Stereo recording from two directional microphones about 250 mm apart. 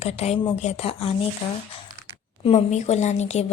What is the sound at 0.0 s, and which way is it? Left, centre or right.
Speech, left.